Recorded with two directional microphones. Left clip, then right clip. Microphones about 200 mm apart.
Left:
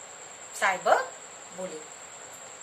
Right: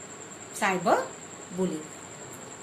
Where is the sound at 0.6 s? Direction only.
10° left (ahead or behind).